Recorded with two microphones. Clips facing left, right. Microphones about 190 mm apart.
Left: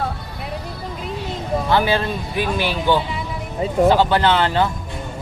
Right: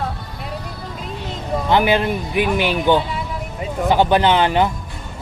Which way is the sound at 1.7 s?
15° right (ahead or behind).